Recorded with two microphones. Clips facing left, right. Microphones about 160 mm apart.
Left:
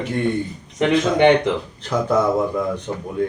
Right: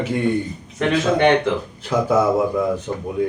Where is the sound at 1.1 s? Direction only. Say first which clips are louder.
Left 2 dB; 15° left (ahead or behind).